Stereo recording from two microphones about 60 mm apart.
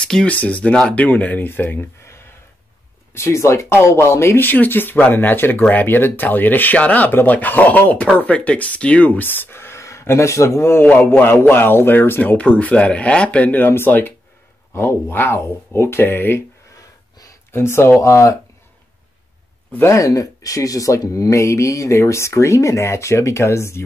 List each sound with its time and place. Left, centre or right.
0.0 s speech: centre; by 2.2 s left
3.2 s speech: left
4.4 s speech: left
11.1 s speech: left
14.7 s speech: left
17.5 s speech: left
19.9 s speech: left